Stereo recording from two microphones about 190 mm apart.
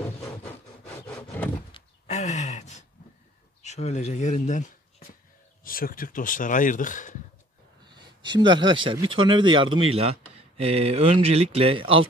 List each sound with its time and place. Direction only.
1.0 s wood: 10° left (ahead or behind)
1.7 s a sound: 35° left (ahead or behind)
3.6 s speech: 35° left (ahead or behind)
8.4 s speech: 25° right (ahead or behind)